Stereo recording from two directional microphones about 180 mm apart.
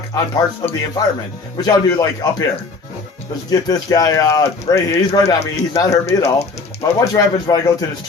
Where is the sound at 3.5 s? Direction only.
20° left (ahead or behind).